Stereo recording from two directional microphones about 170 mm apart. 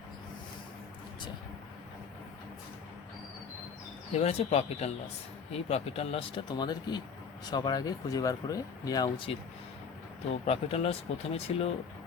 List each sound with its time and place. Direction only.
4.1 s speech: 40° left (ahead or behind)
10.4 s speech: 35° left (ahead or behind)